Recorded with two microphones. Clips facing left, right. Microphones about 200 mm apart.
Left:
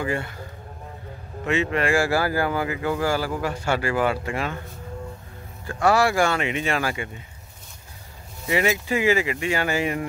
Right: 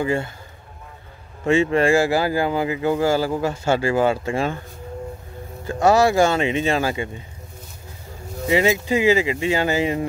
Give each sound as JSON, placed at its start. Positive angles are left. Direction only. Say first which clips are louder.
{"t": 0.0, "sound": "speech", "louder": "right 5 dB", "side_deg": -25}
{"t": 1.4, "sound": "speech", "louder": "right 6 dB", "side_deg": -30}
{"t": 5.7, "sound": "speech", "louder": "right 4 dB", "side_deg": -20}
{"t": 8.5, "sound": "speech", "louder": "right 4 dB", "side_deg": -25}